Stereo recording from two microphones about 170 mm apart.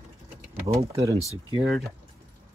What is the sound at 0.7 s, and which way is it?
Speech, 20° right (ahead or behind).